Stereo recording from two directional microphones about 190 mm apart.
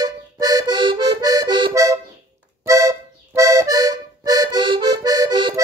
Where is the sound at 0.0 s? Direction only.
20° right (ahead or behind).